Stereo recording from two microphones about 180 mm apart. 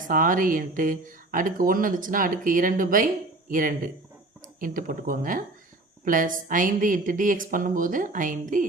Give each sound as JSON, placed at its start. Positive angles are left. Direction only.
{"t": 0.0, "sound": "speech", "side_deg": -50}